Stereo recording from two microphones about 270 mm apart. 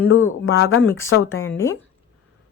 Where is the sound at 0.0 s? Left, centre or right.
Left.